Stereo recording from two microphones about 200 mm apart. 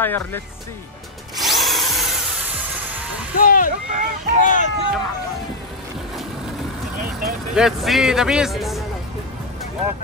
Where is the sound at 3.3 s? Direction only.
45° left (ahead or behind).